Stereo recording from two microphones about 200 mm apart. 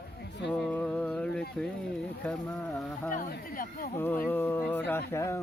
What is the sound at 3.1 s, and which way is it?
Speech, 45° left (ahead or behind).